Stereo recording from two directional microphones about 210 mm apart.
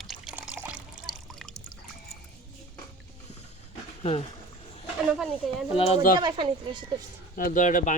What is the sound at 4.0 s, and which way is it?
Speech, 30° left (ahead or behind).